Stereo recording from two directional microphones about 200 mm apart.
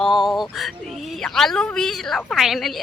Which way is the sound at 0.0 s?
Centre (ahead or behind).